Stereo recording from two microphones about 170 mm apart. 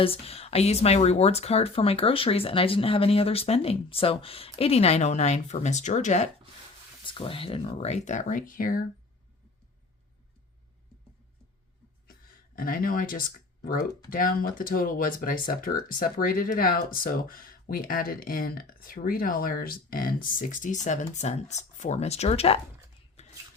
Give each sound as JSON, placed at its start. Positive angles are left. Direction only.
{"t": 0.0, "sound": "speech", "side_deg": 35}
{"t": 7.0, "sound": "speech", "side_deg": 30}
{"t": 12.5, "sound": "speech", "side_deg": 55}
{"t": 23.2, "sound": "a sound", "side_deg": 40}